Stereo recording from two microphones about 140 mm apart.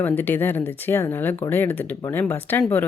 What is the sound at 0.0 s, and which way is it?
Speech, 15° left (ahead or behind).